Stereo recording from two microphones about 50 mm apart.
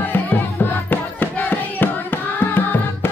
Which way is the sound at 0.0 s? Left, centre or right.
Left.